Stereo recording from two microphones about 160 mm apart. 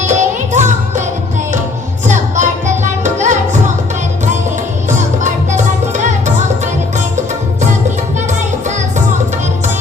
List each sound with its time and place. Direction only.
0.0 s music: 50° right (ahead or behind)
2.0 s music: 50° right (ahead or behind)
4.9 s music: 50° right (ahead or behind)